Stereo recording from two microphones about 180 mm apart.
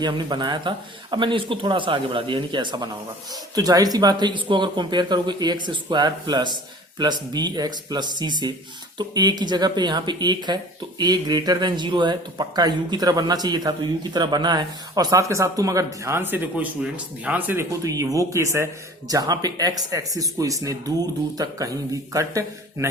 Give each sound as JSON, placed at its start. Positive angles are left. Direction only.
{"t": 0.0, "sound": "a man's voice", "side_deg": -25}